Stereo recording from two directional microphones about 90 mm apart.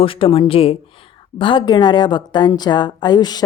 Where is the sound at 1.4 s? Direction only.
60° left (ahead or behind).